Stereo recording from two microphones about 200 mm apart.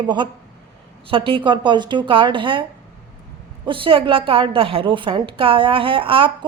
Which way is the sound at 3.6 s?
25° right (ahead or behind).